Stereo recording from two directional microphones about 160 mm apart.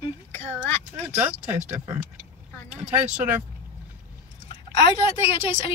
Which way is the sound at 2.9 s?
10° right (ahead or behind).